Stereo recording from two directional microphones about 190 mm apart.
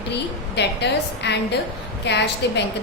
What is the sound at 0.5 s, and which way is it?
A woman's voice, 65° left (ahead or behind).